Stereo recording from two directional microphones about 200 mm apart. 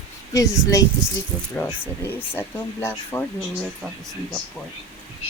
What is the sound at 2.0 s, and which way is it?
A woman's voice, 10° left (ahead or behind).